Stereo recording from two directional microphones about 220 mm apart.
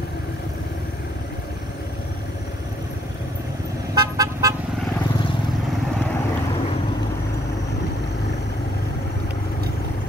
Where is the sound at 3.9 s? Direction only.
15° right (ahead or behind).